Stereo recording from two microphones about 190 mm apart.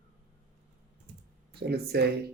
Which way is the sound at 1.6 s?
60° right (ahead or behind).